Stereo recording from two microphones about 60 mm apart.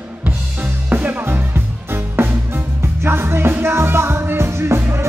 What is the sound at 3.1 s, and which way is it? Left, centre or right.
Music, right.